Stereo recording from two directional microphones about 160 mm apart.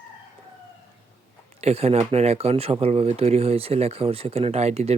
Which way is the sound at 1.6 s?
40° right (ahead or behind).